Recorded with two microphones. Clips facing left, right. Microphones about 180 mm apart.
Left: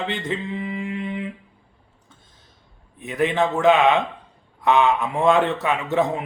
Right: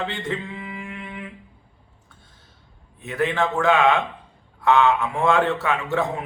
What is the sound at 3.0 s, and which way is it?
A man's voice, 15° left (ahead or behind).